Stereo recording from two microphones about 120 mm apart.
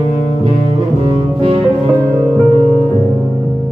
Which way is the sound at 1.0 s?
45° right (ahead or behind).